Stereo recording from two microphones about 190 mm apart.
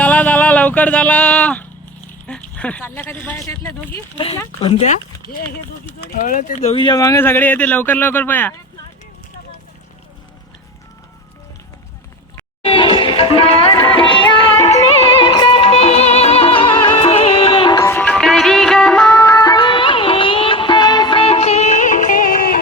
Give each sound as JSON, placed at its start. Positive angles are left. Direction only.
{"t": 0.0, "sound": "music", "side_deg": 5}
{"t": 2.2, "sound": "speech", "side_deg": 5}
{"t": 4.6, "sound": "speech", "side_deg": 30}
{"t": 6.1, "sound": "speech", "side_deg": 45}
{"t": 6.8, "sound": "speech", "side_deg": 20}
{"t": 12.6, "sound": "music", "side_deg": 25}
{"t": 17.7, "sound": "music", "side_deg": 15}